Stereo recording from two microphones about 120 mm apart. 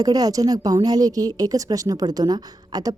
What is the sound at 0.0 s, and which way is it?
A woman's voice, 30° right (ahead or behind).